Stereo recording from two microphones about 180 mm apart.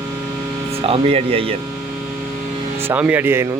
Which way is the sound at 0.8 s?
30° right (ahead or behind).